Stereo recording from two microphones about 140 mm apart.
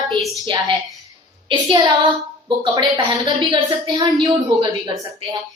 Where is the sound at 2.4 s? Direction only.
35° right (ahead or behind).